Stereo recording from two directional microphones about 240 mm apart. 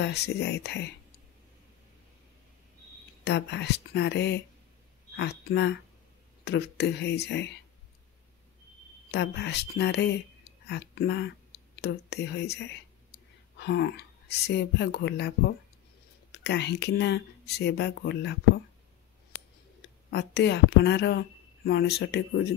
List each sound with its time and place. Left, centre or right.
0.0 s a woman's voice: left
3.3 s a woman's voice: left
9.1 s a woman's voice: left
20.1 s a woman's voice: left